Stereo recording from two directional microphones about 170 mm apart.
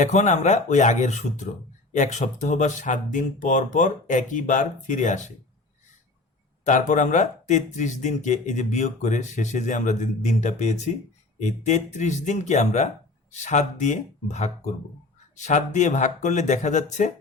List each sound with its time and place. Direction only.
0.0 s speech: 45° left (ahead or behind)
6.7 s speech: 45° left (ahead or behind)